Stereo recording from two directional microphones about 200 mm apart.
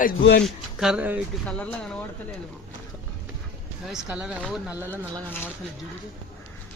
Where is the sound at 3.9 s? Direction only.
5° right (ahead or behind).